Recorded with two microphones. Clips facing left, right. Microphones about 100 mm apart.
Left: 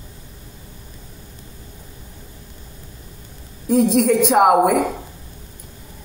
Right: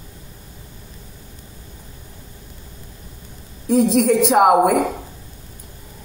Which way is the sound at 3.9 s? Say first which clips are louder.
Even; centre (ahead or behind).